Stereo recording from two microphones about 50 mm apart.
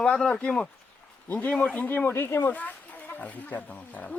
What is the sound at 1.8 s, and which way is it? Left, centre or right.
Speech, left.